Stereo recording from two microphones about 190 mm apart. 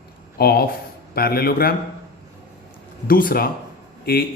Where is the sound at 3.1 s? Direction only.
50° left (ahead or behind).